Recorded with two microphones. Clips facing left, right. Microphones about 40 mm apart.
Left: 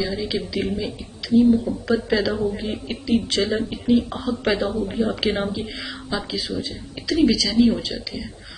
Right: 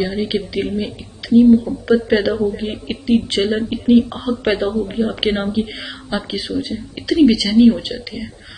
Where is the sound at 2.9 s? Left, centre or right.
Right.